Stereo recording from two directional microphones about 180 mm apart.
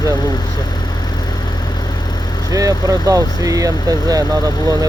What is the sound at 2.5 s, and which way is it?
Speech, 20° right (ahead or behind).